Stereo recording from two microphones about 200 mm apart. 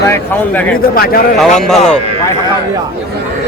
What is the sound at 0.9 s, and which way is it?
Speech, 50° left (ahead or behind).